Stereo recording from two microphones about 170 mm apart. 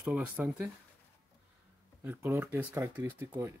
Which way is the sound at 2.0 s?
15° right (ahead or behind).